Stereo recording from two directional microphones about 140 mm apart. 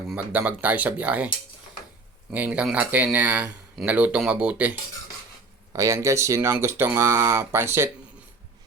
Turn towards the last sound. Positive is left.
turn(degrees=-15)  # may be behind; listen again after turning